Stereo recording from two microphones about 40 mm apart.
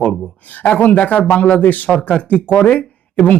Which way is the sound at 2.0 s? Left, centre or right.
Left.